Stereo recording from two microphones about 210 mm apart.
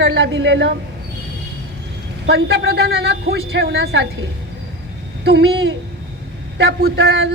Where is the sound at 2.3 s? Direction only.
50° right (ahead or behind).